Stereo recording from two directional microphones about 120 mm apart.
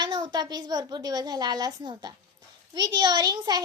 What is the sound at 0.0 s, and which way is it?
A child's voice, 40° right (ahead or behind).